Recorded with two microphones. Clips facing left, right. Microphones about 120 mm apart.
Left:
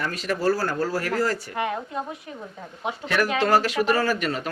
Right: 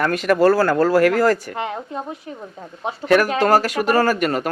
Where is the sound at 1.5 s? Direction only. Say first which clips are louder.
Right 1 dB; 30° right (ahead or behind).